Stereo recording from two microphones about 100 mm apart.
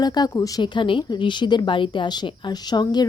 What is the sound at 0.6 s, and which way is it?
Speech, 55° left (ahead or behind).